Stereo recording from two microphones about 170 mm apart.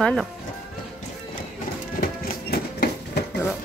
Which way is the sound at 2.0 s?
60° left (ahead or behind).